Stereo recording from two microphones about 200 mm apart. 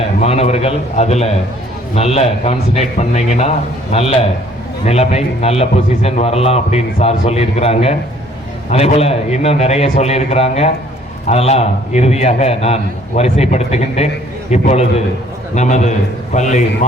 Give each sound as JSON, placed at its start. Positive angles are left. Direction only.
{"t": 0.2, "sound": "a man's voice", "side_deg": 30}